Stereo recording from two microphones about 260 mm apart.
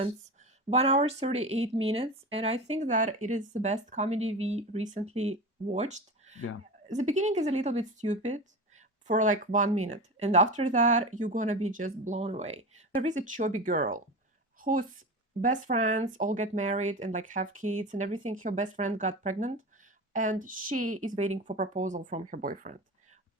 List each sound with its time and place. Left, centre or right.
0.7 s a woman's voice: right